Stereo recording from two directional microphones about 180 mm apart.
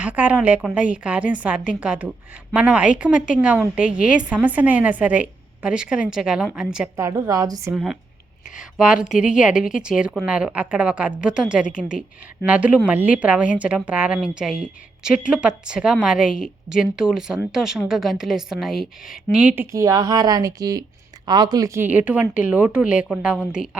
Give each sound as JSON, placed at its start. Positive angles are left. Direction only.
{"t": 0.0, "sound": "a woman's voice", "side_deg": -10}
{"t": 6.9, "sound": "a woman's voice", "side_deg": -15}
{"t": 7.7, "sound": "a woman's voice", "side_deg": -5}